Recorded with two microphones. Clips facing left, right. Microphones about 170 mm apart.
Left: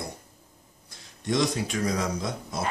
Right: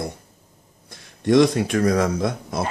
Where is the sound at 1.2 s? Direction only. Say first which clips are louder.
Right 10 dB; 60° right (ahead or behind).